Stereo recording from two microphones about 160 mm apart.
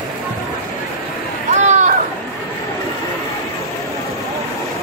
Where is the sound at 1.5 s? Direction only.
45° right (ahead or behind).